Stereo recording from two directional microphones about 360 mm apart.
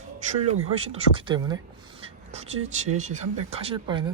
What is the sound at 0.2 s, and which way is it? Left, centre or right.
Speech, centre.